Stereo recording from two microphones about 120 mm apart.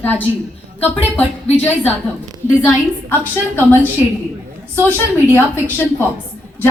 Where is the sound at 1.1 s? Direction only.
15° left (ahead or behind).